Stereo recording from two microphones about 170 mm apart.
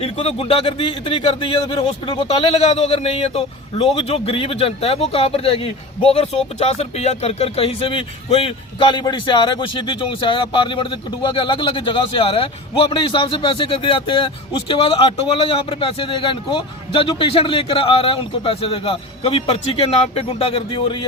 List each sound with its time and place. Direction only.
0.0 s speech: 35° left (ahead or behind)